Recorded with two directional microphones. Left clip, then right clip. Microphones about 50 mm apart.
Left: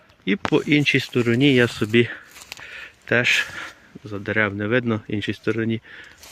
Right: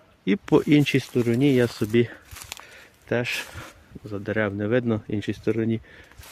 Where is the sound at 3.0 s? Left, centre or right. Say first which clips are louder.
Left 7 dB; left.